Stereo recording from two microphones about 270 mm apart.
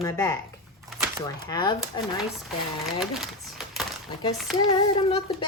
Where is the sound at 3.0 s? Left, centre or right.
Centre.